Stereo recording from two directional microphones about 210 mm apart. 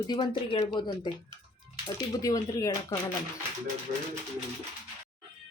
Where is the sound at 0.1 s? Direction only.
20° left (ahead or behind).